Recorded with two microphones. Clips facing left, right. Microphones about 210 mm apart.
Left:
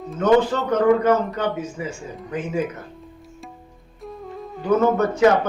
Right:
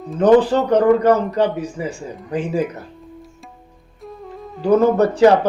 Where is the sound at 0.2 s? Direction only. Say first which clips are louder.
Right 5 dB; 35° right (ahead or behind).